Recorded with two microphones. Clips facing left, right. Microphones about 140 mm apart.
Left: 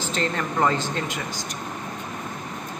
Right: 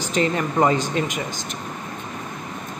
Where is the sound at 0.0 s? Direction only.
15° right (ahead or behind).